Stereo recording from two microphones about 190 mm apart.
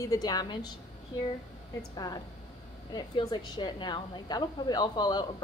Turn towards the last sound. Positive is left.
turn(degrees=20)  # may be behind; listen again after turning